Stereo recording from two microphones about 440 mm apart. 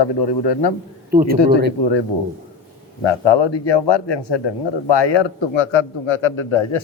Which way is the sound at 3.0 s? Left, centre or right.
Left.